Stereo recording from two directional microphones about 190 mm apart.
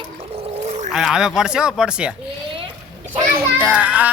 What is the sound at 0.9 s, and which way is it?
Speech, centre (ahead or behind).